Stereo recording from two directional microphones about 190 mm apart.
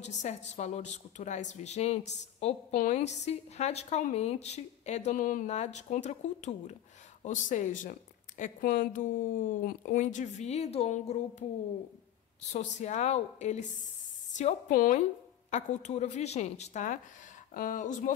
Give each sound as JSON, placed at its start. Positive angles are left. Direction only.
{"t": 0.0, "sound": "a woman's voice", "side_deg": 40}
{"t": 12.5, "sound": "a woman's voice", "side_deg": 40}